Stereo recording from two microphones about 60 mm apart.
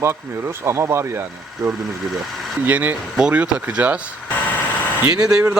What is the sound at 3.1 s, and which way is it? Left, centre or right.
Speech, centre.